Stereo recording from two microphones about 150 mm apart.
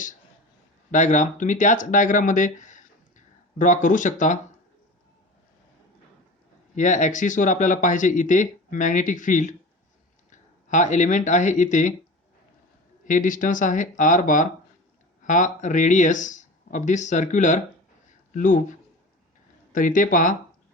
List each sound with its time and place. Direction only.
0.9 s speech: 55° left (ahead or behind)
6.7 s speech: 55° left (ahead or behind)
13.1 s speech: 60° left (ahead or behind)
19.7 s speech: 65° left (ahead or behind)